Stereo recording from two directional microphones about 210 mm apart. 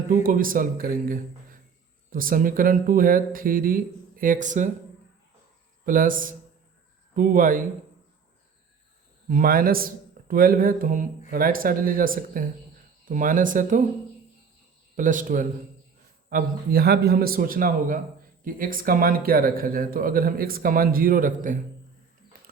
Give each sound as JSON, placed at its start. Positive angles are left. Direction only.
{"t": 0.1, "sound": "speech", "side_deg": -40}
{"t": 5.8, "sound": "speech", "side_deg": -40}
{"t": 9.3, "sound": "speech", "side_deg": -45}
{"t": 14.9, "sound": "speech", "side_deg": -40}